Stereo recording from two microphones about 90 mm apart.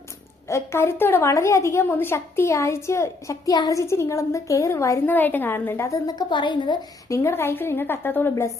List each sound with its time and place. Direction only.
0.4 s a woman's voice: 30° left (ahead or behind)
3.5 s a woman's voice: 50° left (ahead or behind)
3.8 s a woman's voice: 30° left (ahead or behind)
5.0 s a woman's voice: 20° left (ahead or behind)
6.1 s a woman's voice: 55° left (ahead or behind)
7.1 s a woman's voice: 30° left (ahead or behind)